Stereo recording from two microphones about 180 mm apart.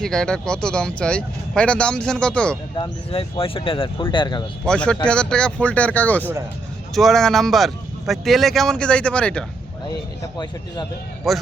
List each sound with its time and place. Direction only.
0.0 s speech: 5° left (ahead or behind)
2.7 s speech: 30° left (ahead or behind)
4.6 s speech: 5° left (ahead or behind)
10.3 s speech: 25° left (ahead or behind)
11.3 s speech: centre (ahead or behind)